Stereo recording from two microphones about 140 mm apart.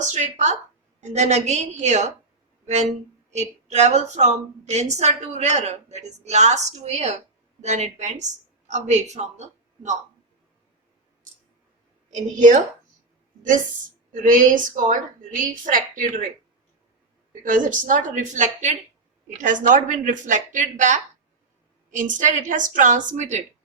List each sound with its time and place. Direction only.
0.0 s a woman's voice: 55° right (ahead or behind)
2.6 s music: 55° right (ahead or behind)
3.3 s a woman's voice: 55° right (ahead or behind)
12.4 s a woman's voice: 60° right (ahead or behind)
14.1 s speech: 70° right (ahead or behind)
17.4 s a woman's voice: 70° right (ahead or behind)